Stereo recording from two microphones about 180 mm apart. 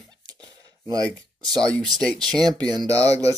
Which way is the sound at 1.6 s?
5° left (ahead or behind).